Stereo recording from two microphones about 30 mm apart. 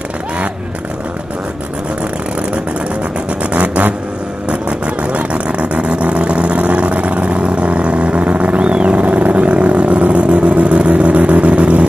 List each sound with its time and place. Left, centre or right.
3.5 s vehicle: right
8.5 s vehicle: right